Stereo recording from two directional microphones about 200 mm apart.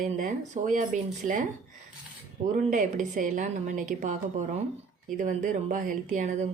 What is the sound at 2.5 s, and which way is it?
A woman's voice, 40° right (ahead or behind).